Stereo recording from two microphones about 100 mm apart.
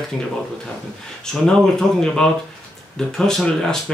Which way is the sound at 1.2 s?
5° left (ahead or behind).